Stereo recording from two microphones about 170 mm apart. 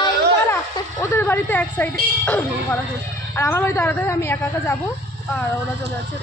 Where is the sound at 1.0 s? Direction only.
10° left (ahead or behind).